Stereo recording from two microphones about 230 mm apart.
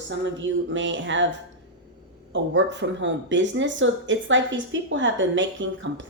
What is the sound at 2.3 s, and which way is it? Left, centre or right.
Speech, right.